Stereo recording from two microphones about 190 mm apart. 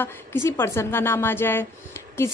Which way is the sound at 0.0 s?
10° left (ahead or behind).